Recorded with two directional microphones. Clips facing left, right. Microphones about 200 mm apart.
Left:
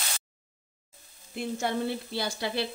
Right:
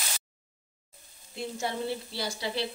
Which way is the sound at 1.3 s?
55° left (ahead or behind).